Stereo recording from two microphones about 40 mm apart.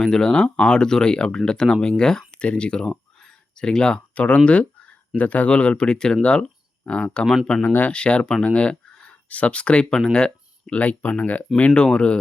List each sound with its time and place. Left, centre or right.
0.0 s speech: centre
10.1 s speech: centre
10.7 s speech: left